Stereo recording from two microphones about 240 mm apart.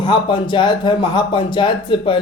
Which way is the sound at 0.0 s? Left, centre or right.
Centre.